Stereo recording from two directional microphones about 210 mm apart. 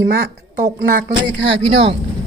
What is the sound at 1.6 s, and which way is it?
Speech, 25° right (ahead or behind).